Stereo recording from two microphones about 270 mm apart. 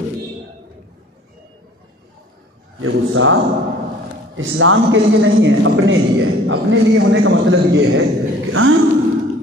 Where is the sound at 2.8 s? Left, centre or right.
Right.